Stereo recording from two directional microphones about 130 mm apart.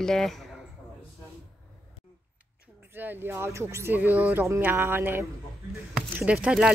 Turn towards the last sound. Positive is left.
turn(degrees=-5)  # may be behind; listen again after turning